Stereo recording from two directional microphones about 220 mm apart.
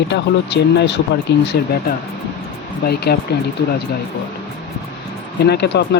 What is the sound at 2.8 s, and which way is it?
Speech, 45° left (ahead or behind).